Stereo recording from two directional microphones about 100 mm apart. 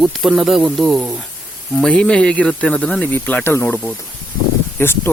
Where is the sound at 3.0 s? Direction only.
15° left (ahead or behind).